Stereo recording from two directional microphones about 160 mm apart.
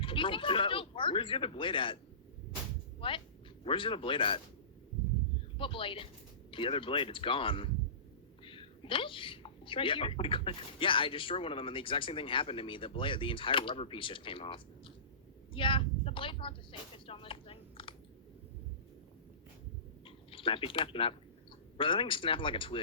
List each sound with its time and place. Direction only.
0.0 s speech: 30° left (ahead or behind)
3.0 s speech: 35° left (ahead or behind)
5.5 s speech: 35° left (ahead or behind)
15.5 s a sound: 30° left (ahead or behind)
20.1 s speech: 35° left (ahead or behind)